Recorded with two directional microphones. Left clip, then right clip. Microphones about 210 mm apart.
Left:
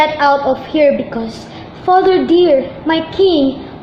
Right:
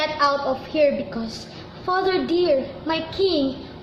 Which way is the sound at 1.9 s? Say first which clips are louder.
Left 11 dB; 20° left (ahead or behind).